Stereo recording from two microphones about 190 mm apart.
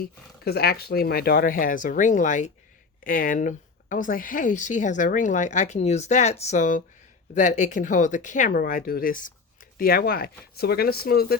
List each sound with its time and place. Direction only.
0.0 s speech: 55° left (ahead or behind)